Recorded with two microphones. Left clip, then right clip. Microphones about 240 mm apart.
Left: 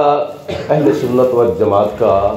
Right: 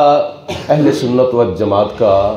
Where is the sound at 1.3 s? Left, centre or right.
Right.